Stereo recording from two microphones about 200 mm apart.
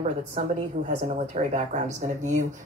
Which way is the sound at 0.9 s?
35° right (ahead or behind).